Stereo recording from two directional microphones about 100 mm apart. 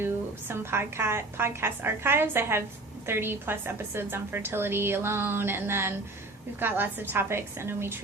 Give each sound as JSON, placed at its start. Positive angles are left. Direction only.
{"t": 0.0, "sound": "a woman's voice", "side_deg": -25}